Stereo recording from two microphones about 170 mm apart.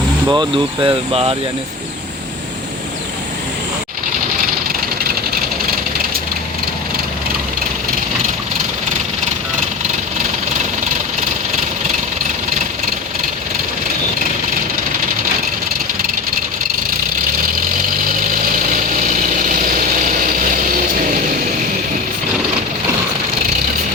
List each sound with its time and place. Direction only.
0.3 s speech: 25° right (ahead or behind)
18.5 s vehicle: 50° right (ahead or behind)